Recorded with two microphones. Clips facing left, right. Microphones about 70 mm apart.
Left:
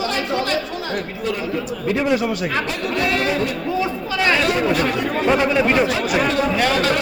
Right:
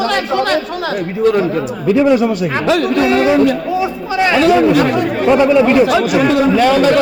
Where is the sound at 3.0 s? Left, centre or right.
Right.